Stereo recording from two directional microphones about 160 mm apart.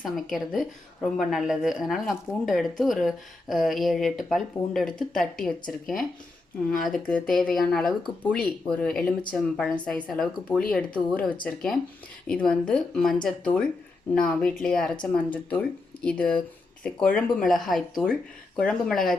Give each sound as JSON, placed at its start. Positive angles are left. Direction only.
{"t": 0.0, "sound": "a woman's voice", "side_deg": 0}